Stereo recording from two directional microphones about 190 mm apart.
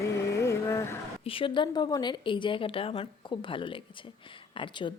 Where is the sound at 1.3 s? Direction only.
25° left (ahead or behind).